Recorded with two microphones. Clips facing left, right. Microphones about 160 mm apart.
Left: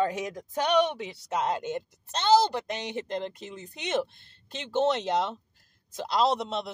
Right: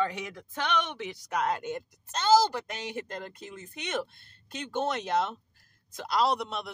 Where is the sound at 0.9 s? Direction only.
20° left (ahead or behind).